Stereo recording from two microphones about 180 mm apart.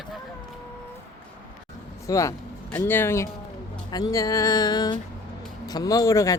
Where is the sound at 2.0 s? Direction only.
20° left (ahead or behind).